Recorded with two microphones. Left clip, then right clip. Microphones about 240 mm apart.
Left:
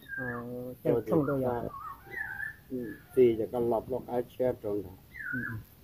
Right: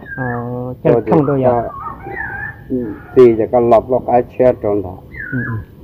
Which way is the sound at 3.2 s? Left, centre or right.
Centre.